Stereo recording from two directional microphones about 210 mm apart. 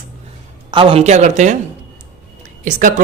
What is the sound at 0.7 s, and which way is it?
Speech, 25° right (ahead or behind).